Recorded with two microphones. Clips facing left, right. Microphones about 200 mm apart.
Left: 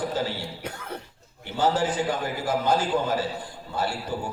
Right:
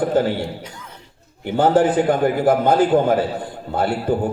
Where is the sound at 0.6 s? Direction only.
60° left (ahead or behind).